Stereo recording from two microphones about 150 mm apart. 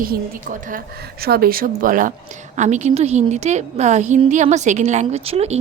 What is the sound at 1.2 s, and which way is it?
Speech, 90° right.